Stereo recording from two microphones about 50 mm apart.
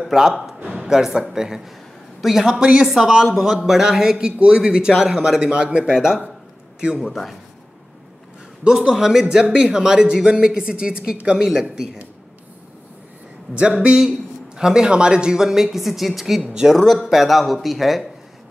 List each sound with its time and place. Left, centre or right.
0.0 s a man's voice: centre
5.9 s a man's voice: centre
8.6 s a man's voice: centre
14.6 s a man's voice: centre
16.4 s a man's voice: centre
16.7 s speech: centre